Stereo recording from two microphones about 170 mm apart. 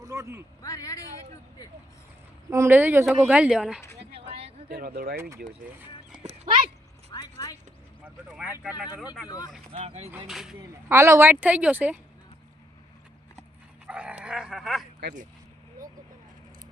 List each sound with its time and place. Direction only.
0.0 s a sound: 20° right (ahead or behind)
0.6 s speech: 20° left (ahead or behind)
2.5 s a woman's voice: 15° right (ahead or behind)
4.3 s a sound: 35° right (ahead or behind)
4.7 s speech: 65° right (ahead or behind)
7.1 s a sound: 25° left (ahead or behind)
8.0 s speech: 10° right (ahead or behind)
9.7 s speech: 35° right (ahead or behind)
10.2 s speech: centre (ahead or behind)
10.8 s a woman's voice: 15° right (ahead or behind)
13.8 s speech: 5° right (ahead or behind)